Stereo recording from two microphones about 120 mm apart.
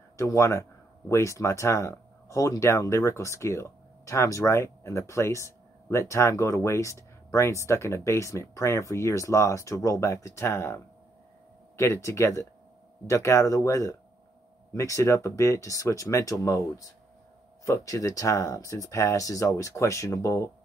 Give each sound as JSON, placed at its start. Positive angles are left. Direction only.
{"t": 0.2, "sound": "speech", "side_deg": 25}